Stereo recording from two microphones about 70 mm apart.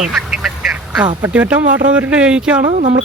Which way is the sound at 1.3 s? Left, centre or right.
Centre.